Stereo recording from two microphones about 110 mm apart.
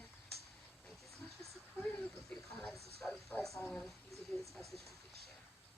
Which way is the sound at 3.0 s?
Centre (ahead or behind).